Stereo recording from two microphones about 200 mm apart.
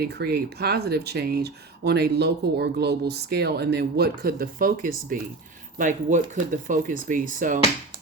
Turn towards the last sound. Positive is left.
turn(degrees=-40)  # may be behind; listen again after turning